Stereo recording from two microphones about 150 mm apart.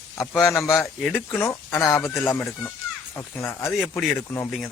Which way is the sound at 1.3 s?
15° left (ahead or behind).